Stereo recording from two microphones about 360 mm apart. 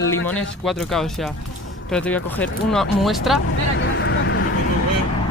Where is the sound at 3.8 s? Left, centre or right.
Left.